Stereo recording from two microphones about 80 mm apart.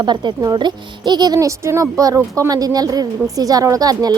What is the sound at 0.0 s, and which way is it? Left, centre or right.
A woman's voice, right.